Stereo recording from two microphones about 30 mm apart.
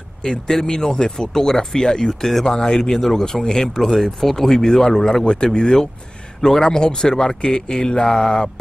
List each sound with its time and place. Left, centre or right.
0.2 s speech: left
2.8 s speech: centre
3.2 s speech: centre
3.8 s speech: centre
5.2 s speech: left